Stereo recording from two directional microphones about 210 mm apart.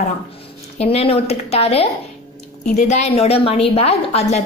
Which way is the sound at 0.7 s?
30° left (ahead or behind).